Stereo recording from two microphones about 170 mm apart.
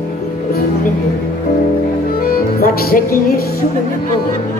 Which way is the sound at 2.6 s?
65° left (ahead or behind).